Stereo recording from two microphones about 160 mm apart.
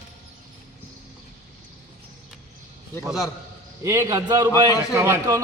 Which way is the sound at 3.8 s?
20° right (ahead or behind).